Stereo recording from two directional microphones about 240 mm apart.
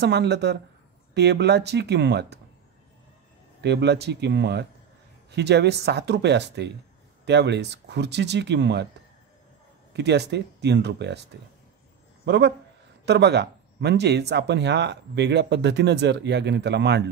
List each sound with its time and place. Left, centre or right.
0.0 s speech: right
3.6 s speech: right
9.9 s speech: right
12.3 s speech: right